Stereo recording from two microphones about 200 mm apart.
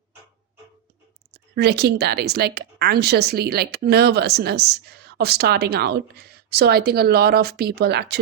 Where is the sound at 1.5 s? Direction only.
55° right (ahead or behind).